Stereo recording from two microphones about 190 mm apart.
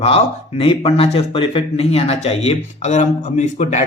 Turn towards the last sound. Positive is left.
turn(degrees=40)  # may be behind; listen again after turning